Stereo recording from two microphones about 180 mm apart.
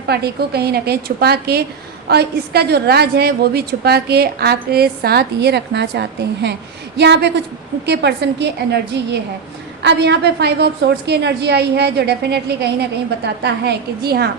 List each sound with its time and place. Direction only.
0.1 s a woman's voice: 60° right (ahead or behind)